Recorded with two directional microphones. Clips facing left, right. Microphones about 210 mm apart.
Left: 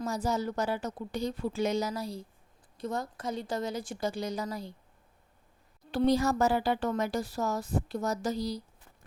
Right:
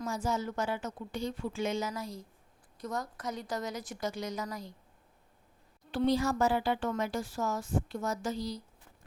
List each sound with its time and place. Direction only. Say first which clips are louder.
0.0 s a woman's voice: left 3 dB; 35° left (ahead or behind)
5.9 s speech: left 3 dB; 40° left (ahead or behind)